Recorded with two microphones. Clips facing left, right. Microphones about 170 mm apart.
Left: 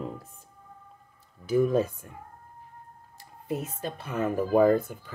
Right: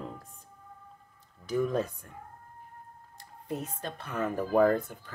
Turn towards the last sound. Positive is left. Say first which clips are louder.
# left 3 dB
turn(degrees=10)  # may be behind; listen again after turning